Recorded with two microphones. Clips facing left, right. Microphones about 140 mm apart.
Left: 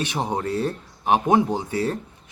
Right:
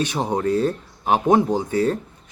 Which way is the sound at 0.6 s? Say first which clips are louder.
Right 3 dB; 20° left (ahead or behind).